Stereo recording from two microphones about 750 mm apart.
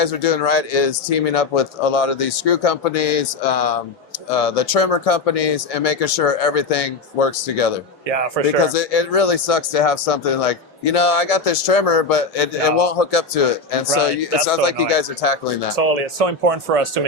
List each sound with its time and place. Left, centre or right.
0.0 s speech: left
15.7 s speech: right